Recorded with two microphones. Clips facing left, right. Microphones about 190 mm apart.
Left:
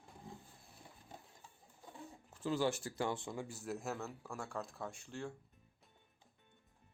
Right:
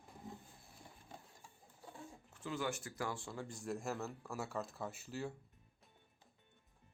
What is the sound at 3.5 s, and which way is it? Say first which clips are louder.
Speech: even; 5° left (ahead or behind).